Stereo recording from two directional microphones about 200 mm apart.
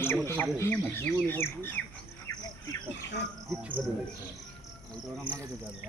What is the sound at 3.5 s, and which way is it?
Speech, 5° right (ahead or behind).